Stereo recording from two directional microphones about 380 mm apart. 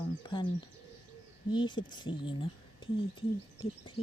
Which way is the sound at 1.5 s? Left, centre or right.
Centre.